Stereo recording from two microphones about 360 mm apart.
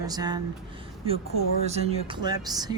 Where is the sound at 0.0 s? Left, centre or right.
Centre.